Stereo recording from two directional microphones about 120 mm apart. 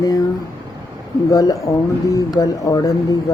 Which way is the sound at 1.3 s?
25° left (ahead or behind).